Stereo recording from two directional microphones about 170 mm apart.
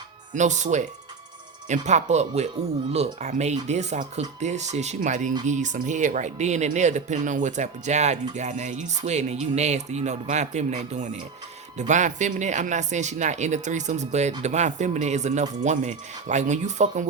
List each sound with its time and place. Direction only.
0.3 s speech: 45° right (ahead or behind)